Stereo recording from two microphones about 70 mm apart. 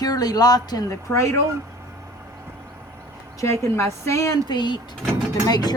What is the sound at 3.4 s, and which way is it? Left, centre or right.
Speech, left.